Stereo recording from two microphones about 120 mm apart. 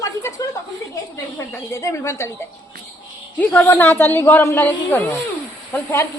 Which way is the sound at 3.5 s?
15° left (ahead or behind).